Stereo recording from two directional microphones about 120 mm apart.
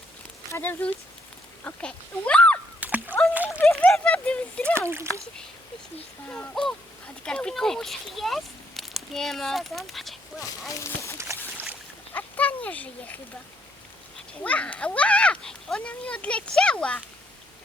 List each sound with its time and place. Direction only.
0.5 s a child's voice: 15° left (ahead or behind)
2.8 s a sound: 15° right (ahead or behind)
3.3 s speech: 15° right (ahead or behind)
3.8 s a child's voice: 10° left (ahead or behind)
6.2 s a child's voice: 10° left (ahead or behind)
10.7 s speech: 25° left (ahead or behind)
12.1 s a sound: 15° left (ahead or behind)
12.6 s a child's voice: 15° left (ahead or behind)
14.4 s a child's voice: 10° left (ahead or behind)